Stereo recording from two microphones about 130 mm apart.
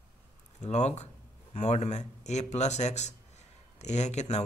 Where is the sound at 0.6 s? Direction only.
60° left (ahead or behind).